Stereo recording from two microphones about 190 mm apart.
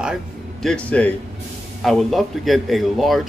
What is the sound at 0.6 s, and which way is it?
Speech, 5° left (ahead or behind).